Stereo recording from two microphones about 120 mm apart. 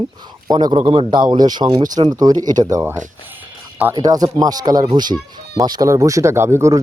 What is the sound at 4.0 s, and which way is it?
Speech, 35° right (ahead or behind).